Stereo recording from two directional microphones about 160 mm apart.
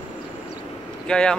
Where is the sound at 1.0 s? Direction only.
5° left (ahead or behind).